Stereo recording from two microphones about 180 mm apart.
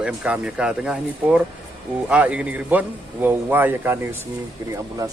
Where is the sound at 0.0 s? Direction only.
5° right (ahead or behind).